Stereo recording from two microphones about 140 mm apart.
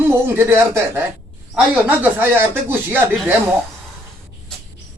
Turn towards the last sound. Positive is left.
turn(degrees=-15)  # may be behind; listen again after turning